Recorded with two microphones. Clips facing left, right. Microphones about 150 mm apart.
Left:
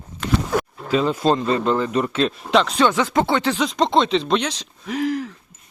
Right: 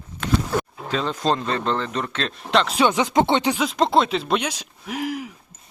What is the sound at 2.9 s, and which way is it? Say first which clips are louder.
Speech: even; 20° right (ahead or behind).